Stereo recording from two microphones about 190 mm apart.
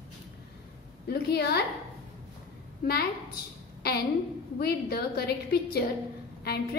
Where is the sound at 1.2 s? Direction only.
60° left (ahead or behind).